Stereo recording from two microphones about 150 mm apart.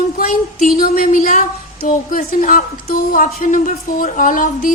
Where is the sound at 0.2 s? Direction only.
65° left (ahead or behind).